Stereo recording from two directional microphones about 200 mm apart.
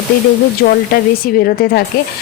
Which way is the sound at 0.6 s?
50° left (ahead or behind).